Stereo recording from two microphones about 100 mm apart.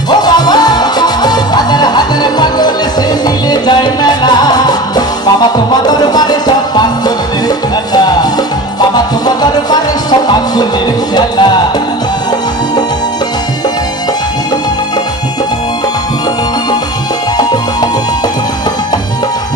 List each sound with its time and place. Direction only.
0.1 s music: 45° left (ahead or behind)